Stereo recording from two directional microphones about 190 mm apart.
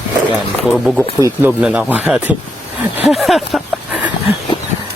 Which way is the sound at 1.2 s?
15° right (ahead or behind).